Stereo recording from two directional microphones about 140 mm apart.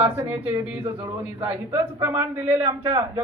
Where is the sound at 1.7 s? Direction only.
20° right (ahead or behind).